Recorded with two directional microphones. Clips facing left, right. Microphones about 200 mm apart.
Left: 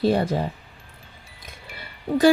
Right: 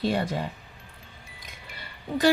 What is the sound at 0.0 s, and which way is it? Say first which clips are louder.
Speech: left 6 dB; 40° left (ahead or behind).